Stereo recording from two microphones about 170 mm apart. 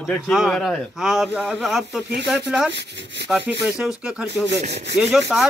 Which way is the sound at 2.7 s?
90° right.